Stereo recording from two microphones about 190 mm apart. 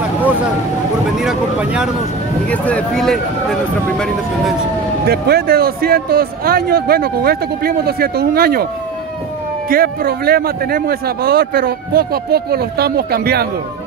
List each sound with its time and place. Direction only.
1.1 s vehicle: 5° right (ahead or behind)
2.5 s speech: 5° left (ahead or behind)
5.0 s speech: 55° right (ahead or behind)
9.7 s speech: 50° right (ahead or behind)